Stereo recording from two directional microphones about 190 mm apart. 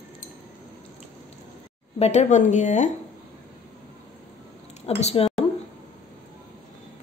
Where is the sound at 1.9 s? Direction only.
35° left (ahead or behind).